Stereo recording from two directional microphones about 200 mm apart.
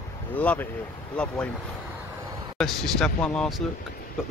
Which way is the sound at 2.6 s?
Centre (ahead or behind).